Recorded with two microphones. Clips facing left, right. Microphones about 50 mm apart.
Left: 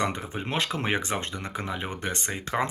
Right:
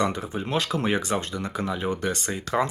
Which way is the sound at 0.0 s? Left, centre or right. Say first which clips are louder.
Right 3 dB; left.